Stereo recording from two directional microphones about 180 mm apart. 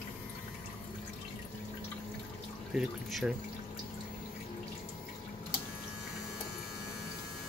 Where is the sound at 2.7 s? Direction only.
Centre (ahead or behind).